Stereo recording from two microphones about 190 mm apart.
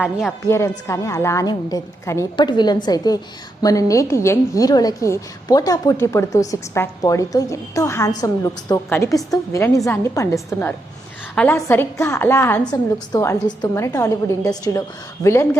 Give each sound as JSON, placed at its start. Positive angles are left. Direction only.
{"t": 0.0, "sound": "speech", "side_deg": 0}
{"t": 0.4, "sound": "a woman's voice", "side_deg": 15}
{"t": 11.3, "sound": "a woman's voice", "side_deg": 10}